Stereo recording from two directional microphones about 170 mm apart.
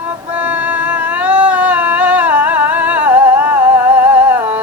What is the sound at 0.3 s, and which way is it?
Humming, 10° right (ahead or behind).